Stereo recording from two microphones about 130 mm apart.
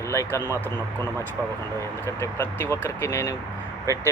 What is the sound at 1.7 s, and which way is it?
Speech, 20° left (ahead or behind).